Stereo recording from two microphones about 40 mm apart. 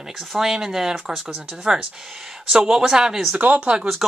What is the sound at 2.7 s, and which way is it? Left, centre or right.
Speech, centre.